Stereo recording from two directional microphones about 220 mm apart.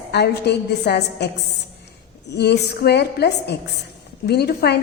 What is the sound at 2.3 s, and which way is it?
A woman's voice, 50° left (ahead or behind).